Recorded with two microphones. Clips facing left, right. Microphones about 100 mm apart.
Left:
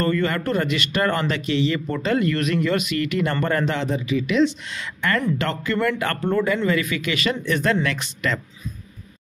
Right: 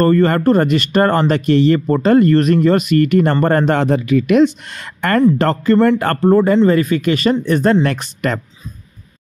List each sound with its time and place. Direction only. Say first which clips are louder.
0.0 s speech: right 10 dB; 40° right (ahead or behind)
5.4 s speech: right 10 dB; 40° right (ahead or behind)